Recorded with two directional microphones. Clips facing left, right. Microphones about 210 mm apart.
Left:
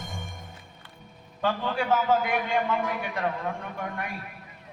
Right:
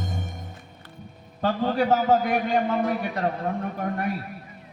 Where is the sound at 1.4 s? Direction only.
40° right (ahead or behind).